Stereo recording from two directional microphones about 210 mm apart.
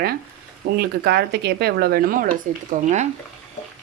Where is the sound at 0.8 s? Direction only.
50° right (ahead or behind).